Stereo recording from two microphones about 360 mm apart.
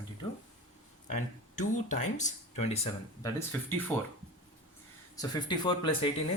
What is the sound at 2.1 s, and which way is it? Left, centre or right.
Speech, centre.